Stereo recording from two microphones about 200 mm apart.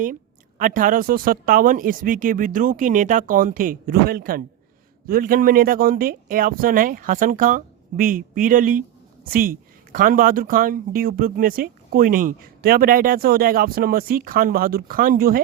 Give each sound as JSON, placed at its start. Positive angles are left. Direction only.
{"t": 0.6, "sound": "speech", "side_deg": -40}